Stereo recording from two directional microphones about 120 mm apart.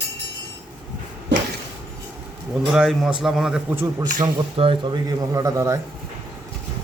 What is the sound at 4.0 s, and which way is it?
Speech, 40° right (ahead or behind).